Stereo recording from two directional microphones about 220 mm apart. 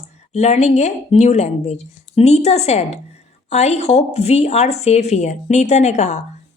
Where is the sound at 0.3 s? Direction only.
30° left (ahead or behind).